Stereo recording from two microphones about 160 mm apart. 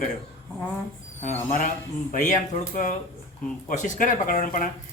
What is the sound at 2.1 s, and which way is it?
Speech, 50° left (ahead or behind).